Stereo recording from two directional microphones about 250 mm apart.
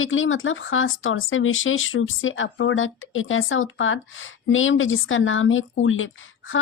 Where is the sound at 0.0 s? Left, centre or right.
Left.